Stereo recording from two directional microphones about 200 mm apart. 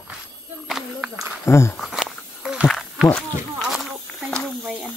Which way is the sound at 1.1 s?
15° right (ahead or behind).